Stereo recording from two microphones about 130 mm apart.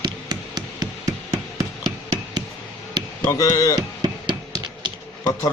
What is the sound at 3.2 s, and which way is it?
Speech, 25° left (ahead or behind).